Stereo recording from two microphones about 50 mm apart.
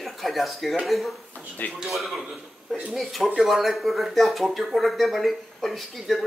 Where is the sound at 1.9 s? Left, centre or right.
Centre.